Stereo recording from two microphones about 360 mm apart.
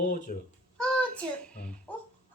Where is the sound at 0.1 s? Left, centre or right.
Left.